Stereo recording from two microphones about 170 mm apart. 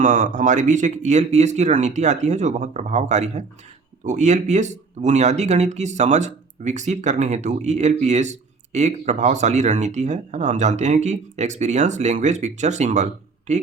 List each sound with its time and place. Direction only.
0.0 s speech: 45° right (ahead or behind)